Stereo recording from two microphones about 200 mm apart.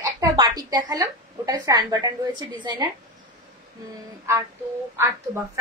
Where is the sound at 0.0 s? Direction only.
20° right (ahead or behind).